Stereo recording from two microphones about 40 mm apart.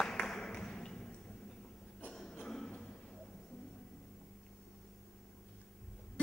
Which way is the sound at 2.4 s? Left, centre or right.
Centre.